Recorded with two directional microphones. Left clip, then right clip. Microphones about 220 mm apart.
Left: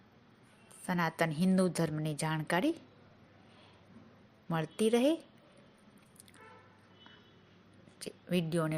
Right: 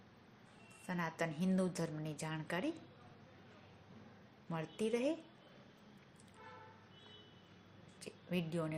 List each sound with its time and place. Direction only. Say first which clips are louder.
0.9 s a woman's voice: left 8 dB; 40° left (ahead or behind)
4.4 s a woman's voice: left 8 dB; 35° left (ahead or behind)
7.9 s a sound: left 7 dB; 35° left (ahead or behind)